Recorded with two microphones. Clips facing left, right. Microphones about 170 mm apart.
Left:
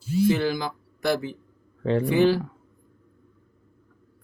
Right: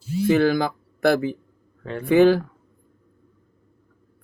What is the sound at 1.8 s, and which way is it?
Speech, 30° left (ahead or behind).